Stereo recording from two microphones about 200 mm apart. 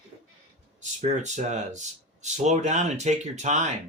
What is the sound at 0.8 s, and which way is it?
Speech, 35° right (ahead or behind).